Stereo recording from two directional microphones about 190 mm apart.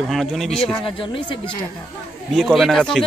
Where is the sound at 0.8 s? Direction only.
25° left (ahead or behind).